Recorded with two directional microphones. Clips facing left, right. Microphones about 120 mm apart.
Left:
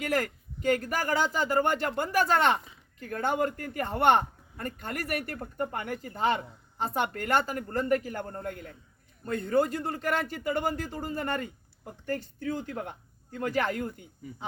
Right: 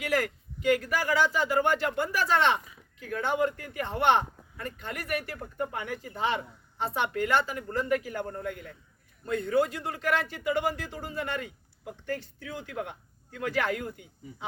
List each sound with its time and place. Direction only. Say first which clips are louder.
0.0 s speech: right 1 dB; 45° left (ahead or behind)